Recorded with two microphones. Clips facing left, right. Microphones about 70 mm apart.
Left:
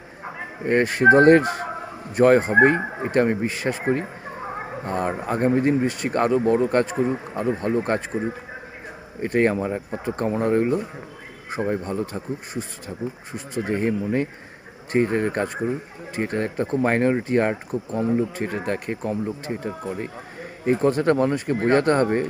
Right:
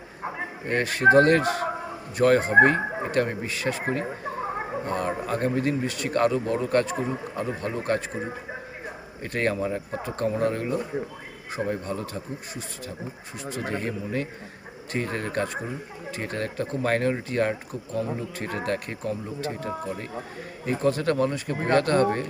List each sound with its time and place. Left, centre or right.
0.6 s speech: left
9.2 s speech: left
18.3 s speech: centre; by 21.6 s left
21.7 s speech: left